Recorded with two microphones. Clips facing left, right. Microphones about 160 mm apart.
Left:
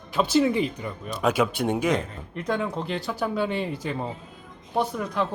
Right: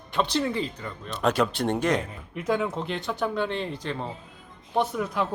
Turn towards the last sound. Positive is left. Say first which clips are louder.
# even
turn(degrees=0)  # may be behind; listen again after turning